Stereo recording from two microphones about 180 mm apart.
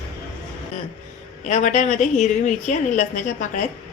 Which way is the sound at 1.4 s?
45° left (ahead or behind).